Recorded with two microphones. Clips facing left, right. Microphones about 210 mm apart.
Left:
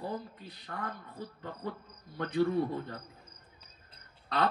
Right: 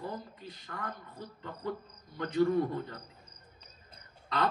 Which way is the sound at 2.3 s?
45° right (ahead or behind).